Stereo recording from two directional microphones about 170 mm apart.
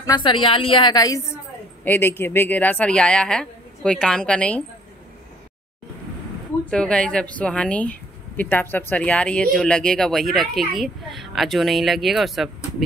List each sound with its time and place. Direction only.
0.0 s a woman's voice: 25° left (ahead or behind); by 4.6 s 5° left (ahead or behind)
6.7 s speech: 5° left (ahead or behind)